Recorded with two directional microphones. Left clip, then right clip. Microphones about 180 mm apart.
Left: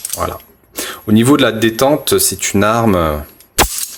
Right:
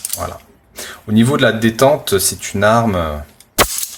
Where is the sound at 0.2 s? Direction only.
45° left (ahead or behind).